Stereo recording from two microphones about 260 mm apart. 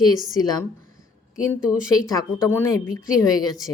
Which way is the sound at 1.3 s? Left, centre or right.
Centre.